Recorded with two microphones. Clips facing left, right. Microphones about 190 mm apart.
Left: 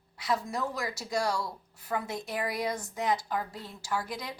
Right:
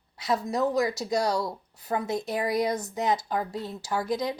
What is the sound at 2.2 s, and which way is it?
Speech, 20° right (ahead or behind).